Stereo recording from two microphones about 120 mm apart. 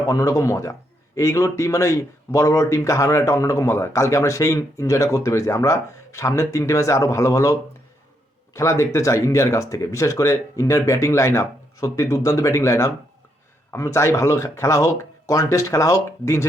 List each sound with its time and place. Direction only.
0.1 s a man's voice: 25° left (ahead or behind)
8.5 s a man's voice: 25° left (ahead or behind)